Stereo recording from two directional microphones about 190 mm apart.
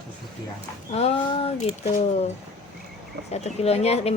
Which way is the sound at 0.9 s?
30° left (ahead or behind).